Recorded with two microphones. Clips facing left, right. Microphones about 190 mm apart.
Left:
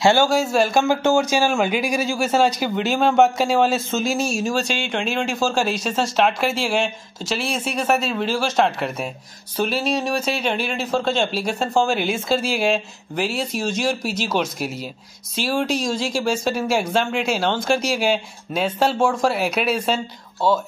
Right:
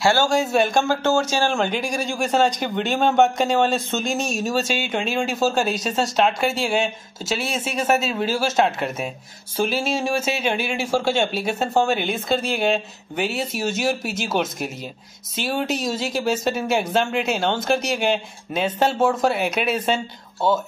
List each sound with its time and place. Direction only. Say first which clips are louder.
0.0 s speech: left 3 dB; 15° left (ahead or behind)
0.3 s a man's voice: left 1 dB; centre (ahead or behind)
0.8 s a man's voice: left 2 dB; 10° left (ahead or behind)